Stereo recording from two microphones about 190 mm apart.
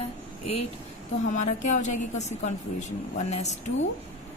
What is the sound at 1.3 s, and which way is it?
A woman's voice, 40° left (ahead or behind).